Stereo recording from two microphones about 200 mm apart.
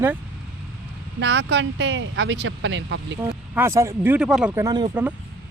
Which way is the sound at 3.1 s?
15° right (ahead or behind).